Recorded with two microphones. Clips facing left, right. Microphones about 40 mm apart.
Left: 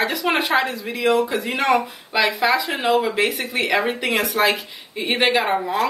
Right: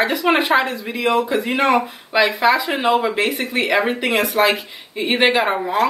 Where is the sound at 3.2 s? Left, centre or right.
Centre.